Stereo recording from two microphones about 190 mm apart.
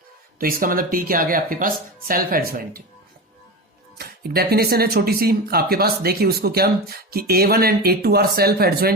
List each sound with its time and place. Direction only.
0.3 s speech: 50° right (ahead or behind)
3.9 s speech: 55° right (ahead or behind)